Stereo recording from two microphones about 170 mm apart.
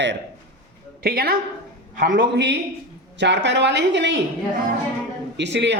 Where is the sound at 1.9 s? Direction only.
50° right (ahead or behind).